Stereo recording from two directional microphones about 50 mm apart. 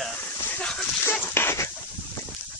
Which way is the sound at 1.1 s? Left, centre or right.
Left.